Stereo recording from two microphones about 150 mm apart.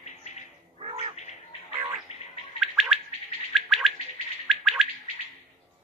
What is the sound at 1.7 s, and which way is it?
Music, 15° right (ahead or behind).